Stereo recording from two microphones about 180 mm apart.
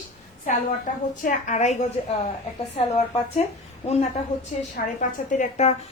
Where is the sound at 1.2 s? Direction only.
45° left (ahead or behind).